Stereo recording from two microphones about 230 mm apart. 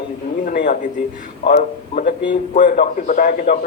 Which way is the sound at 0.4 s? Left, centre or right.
Left.